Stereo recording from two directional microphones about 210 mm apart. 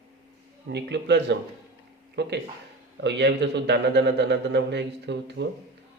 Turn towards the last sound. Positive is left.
turn(degrees=-55)  # may be behind; listen again after turning